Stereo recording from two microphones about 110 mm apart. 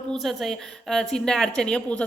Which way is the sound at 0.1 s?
Centre (ahead or behind).